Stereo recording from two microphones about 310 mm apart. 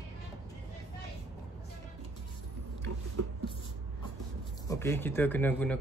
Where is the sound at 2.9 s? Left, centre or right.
Right.